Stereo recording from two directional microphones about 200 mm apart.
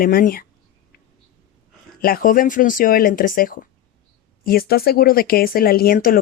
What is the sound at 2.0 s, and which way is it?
Speech, 45° left (ahead or behind).